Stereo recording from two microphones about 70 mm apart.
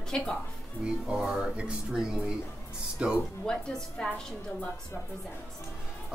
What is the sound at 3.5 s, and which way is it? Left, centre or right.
Speech, centre.